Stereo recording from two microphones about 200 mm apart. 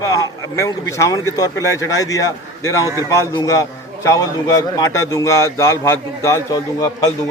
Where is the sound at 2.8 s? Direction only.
15° right (ahead or behind).